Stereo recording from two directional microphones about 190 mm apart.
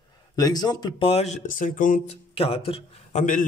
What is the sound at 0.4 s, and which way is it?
Speech, 20° left (ahead or behind).